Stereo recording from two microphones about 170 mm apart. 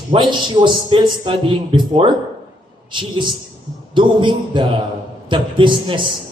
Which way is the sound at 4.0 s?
30° right (ahead or behind).